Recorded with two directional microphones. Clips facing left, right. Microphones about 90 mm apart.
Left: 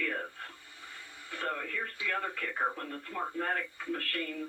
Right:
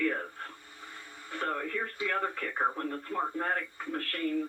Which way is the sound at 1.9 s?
30° right (ahead or behind).